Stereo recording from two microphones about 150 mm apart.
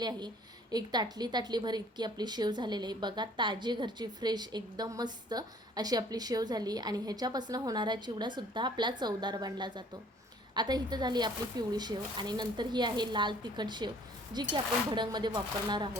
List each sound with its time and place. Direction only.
0.0 s a woman's voice: 30° right (ahead or behind)